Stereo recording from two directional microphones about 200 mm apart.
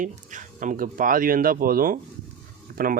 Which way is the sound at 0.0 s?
40° right (ahead or behind).